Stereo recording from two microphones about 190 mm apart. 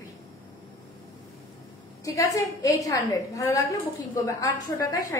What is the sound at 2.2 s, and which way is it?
Speech, 15° left (ahead or behind).